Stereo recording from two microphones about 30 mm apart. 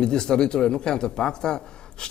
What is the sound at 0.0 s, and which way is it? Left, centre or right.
Speech, left.